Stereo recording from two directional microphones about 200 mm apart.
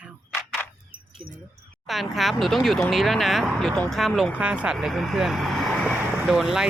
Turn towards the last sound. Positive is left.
turn(degrees=0)  # may be behind; listen again after turning